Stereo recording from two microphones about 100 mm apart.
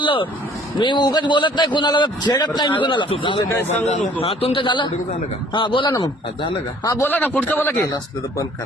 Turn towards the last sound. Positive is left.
turn(degrees=25)  # may be behind; listen again after turning